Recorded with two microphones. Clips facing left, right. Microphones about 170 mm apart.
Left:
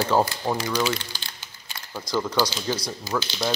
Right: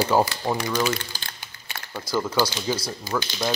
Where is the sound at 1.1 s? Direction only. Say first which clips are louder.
Right 1 dB; 55° right (ahead or behind).